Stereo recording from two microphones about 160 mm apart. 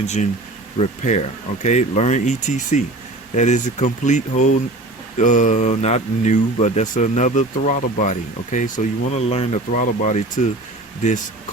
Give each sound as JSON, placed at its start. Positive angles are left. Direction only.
{"t": 0.0, "sound": "speech", "side_deg": 45}
{"t": 9.7, "sound": "speech", "side_deg": 50}